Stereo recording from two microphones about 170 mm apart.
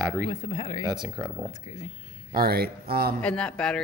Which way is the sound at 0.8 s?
25° right (ahead or behind).